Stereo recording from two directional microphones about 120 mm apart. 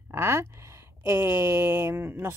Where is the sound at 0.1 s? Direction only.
20° right (ahead or behind).